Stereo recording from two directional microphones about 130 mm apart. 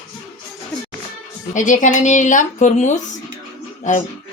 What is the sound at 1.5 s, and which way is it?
Speech, 70° left (ahead or behind).